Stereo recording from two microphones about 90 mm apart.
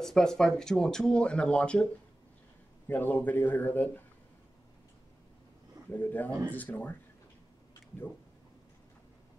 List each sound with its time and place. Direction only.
0.0 s speech: 5° left (ahead or behind)
2.9 s speech: 20° left (ahead or behind)
5.9 s speech: 20° left (ahead or behind)